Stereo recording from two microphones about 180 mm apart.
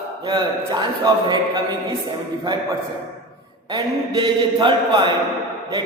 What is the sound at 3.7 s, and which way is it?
A man's voice, 25° right (ahead or behind).